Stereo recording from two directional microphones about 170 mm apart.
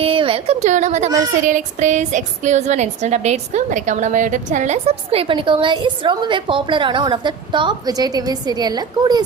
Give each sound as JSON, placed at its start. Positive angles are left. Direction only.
{"t": 0.0, "sound": "speech", "side_deg": -30}